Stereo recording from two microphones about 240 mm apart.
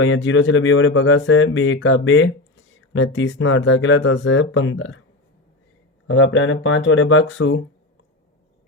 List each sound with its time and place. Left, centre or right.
0.0 s speech: left
6.1 s speech: left